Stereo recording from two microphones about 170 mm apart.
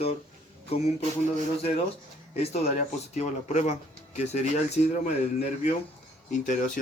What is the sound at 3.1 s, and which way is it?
Speech, 40° left (ahead or behind).